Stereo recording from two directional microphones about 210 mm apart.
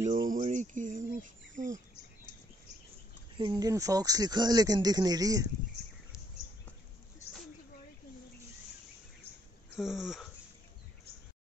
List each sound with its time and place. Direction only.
0.0 s a sound: 40° right (ahead or behind)
1.6 s cricket: 35° right (ahead or behind)
3.3 s speech: 20° right (ahead or behind)
9.8 s wheeze: centre (ahead or behind)